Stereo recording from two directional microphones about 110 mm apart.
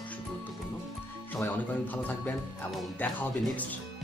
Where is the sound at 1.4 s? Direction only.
15° left (ahead or behind).